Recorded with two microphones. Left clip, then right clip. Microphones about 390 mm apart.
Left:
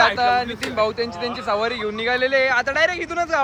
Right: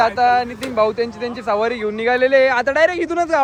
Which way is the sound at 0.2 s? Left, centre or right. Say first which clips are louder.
Right 4 dB; centre.